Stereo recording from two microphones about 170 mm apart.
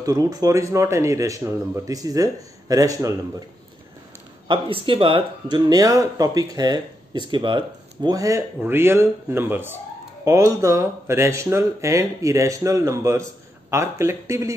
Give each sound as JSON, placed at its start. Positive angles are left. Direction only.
{"t": 0.0, "sound": "speech", "side_deg": -20}
{"t": 4.5, "sound": "speech", "side_deg": -30}